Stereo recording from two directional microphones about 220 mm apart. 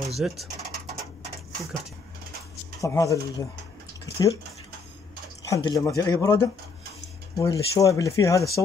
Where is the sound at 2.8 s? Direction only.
15° left (ahead or behind).